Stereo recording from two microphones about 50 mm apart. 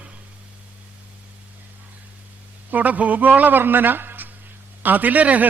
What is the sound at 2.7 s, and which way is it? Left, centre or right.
A man's voice, right.